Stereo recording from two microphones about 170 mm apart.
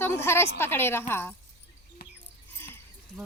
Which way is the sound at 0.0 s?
15° left (ahead or behind).